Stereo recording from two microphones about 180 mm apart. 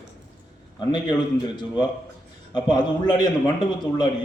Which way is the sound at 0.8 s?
25° left (ahead or behind).